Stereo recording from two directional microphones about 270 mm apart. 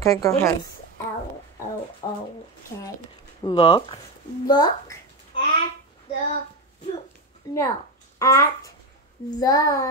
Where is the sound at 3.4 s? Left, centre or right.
Centre.